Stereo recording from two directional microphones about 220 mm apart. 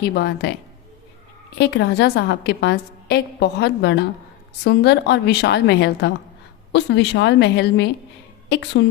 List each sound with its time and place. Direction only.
0.0 s a woman's voice: 45° left (ahead or behind)
1.5 s a woman's voice: 50° left (ahead or behind)